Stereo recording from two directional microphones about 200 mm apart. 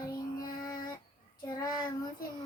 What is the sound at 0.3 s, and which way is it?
Child singing, 20° left (ahead or behind).